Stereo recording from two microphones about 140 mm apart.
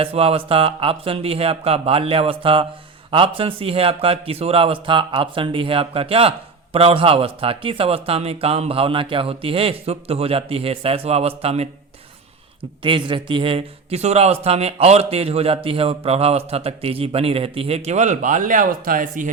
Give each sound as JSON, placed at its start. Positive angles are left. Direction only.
{"t": 0.0, "sound": "a man's voice", "side_deg": -45}
{"t": 12.8, "sound": "a man's voice", "side_deg": -35}